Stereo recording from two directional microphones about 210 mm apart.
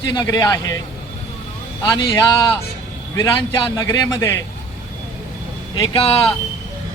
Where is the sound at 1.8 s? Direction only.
20° left (ahead or behind).